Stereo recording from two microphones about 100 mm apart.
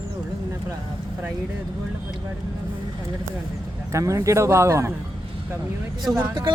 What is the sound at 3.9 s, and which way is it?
Speech, 30° right (ahead or behind).